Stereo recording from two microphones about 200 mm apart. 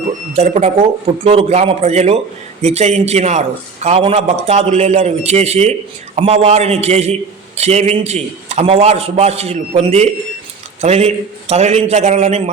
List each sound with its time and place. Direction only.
0.3 s a man's voice: 35° right (ahead or behind)